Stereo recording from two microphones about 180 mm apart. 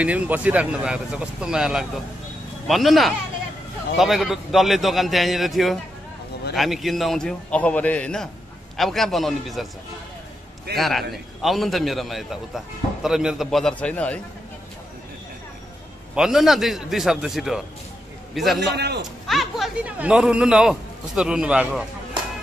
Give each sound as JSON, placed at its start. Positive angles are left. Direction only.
{"t": 0.0, "sound": "a man's voice", "side_deg": -5}
{"t": 10.8, "sound": "a man's voice", "side_deg": 0}
{"t": 16.2, "sound": "a man's voice", "side_deg": 0}
{"t": 18.8, "sound": "a man's voice", "side_deg": -65}
{"t": 19.2, "sound": "a man's voice", "side_deg": 0}